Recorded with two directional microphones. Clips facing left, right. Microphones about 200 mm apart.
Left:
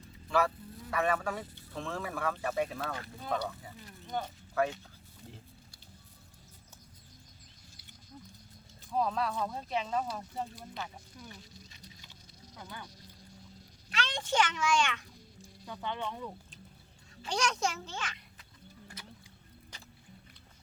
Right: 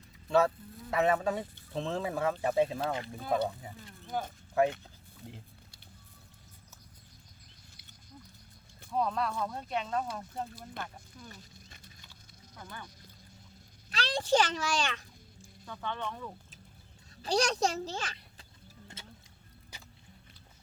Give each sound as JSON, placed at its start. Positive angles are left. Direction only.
{"t": 0.3, "sound": "speech", "side_deg": -25}
{"t": 4.0, "sound": "a sound", "side_deg": -5}
{"t": 4.6, "sound": "speech", "side_deg": -20}
{"t": 8.9, "sound": "speech", "side_deg": 0}
{"t": 12.5, "sound": "speech", "side_deg": 10}
{"t": 13.9, "sound": "a child's voice", "side_deg": -35}
{"t": 15.6, "sound": "speech", "side_deg": 15}
{"t": 17.2, "sound": "a child's voice", "side_deg": -35}
{"t": 19.0, "sound": "music", "side_deg": -25}
{"t": 19.7, "sound": "music", "side_deg": -10}